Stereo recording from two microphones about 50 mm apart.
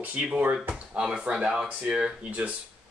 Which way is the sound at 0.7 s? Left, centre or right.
Centre.